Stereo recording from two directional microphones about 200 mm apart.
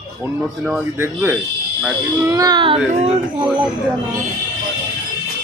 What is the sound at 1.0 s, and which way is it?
A child's voice, 10° right (ahead or behind).